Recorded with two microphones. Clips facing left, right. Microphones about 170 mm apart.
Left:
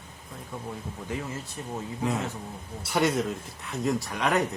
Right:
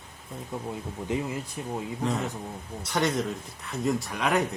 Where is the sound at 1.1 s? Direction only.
20° right (ahead or behind).